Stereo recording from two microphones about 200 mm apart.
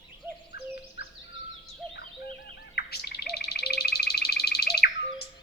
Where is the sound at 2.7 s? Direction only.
50° left (ahead or behind).